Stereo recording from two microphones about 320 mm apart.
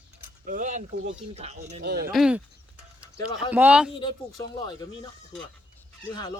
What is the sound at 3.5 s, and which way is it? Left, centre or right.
Speech, centre.